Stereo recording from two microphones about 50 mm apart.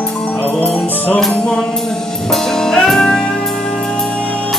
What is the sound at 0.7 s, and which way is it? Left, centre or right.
Music, left.